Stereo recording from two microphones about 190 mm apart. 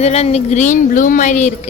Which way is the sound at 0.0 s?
35° left (ahead or behind).